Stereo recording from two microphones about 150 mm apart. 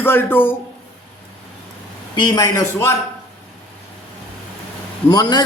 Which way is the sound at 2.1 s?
30° left (ahead or behind).